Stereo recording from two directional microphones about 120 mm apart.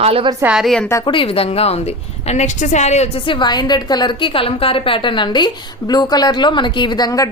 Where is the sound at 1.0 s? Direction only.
45° left (ahead or behind); by 3.2 s 65° left (ahead or behind).